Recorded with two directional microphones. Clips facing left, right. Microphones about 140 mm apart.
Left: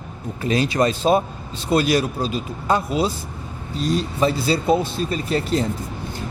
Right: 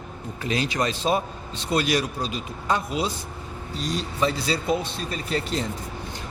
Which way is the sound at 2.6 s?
40° left (ahead or behind).